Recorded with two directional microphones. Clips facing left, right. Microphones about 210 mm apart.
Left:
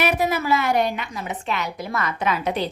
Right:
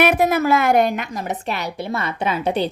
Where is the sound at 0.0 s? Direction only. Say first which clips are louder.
Right 5 dB; 50° right (ahead or behind).